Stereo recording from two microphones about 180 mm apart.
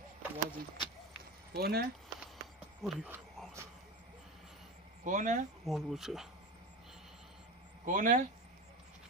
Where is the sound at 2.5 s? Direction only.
5° right (ahead or behind).